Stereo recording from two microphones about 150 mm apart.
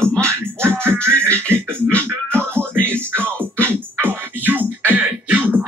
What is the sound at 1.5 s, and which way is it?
Music, 15° right (ahead or behind).